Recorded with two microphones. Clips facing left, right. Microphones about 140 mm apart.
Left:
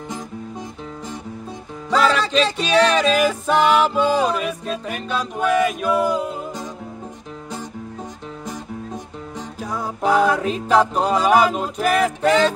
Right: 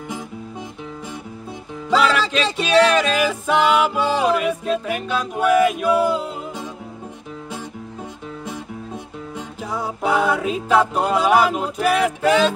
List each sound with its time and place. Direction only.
1.9 s music: 5° right (ahead or behind)
9.7 s music: 5° right (ahead or behind)